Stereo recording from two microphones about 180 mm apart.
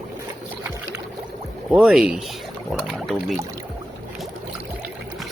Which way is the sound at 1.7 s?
5° right (ahead or behind).